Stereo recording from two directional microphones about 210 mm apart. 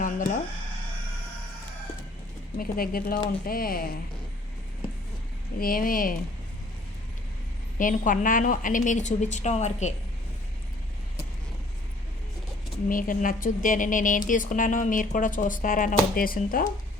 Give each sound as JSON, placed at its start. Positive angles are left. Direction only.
{"t": 0.0, "sound": "a sound", "side_deg": 40}
{"t": 2.6, "sound": "speech", "side_deg": 45}
{"t": 5.5, "sound": "speech", "side_deg": 45}
{"t": 7.8, "sound": "speech", "side_deg": 40}
{"t": 12.9, "sound": "speech", "side_deg": 40}